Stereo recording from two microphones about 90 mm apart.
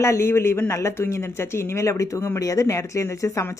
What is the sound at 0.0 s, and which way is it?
Speech, 30° left (ahead or behind).